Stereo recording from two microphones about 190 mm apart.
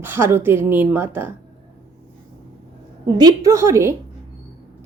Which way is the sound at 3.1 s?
20° right (ahead or behind).